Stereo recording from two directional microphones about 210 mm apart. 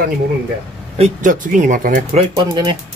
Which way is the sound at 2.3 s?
20° right (ahead or behind).